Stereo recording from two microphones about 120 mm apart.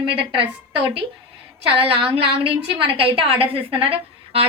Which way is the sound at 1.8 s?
50° right (ahead or behind).